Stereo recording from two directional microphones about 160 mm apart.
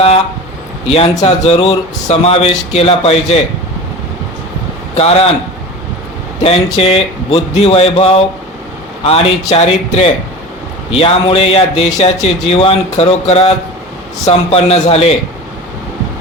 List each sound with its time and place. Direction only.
0.9 s a man's voice: 35° left (ahead or behind)
4.9 s a man's voice: 40° left (ahead or behind)
6.4 s a man's voice: 40° left (ahead or behind)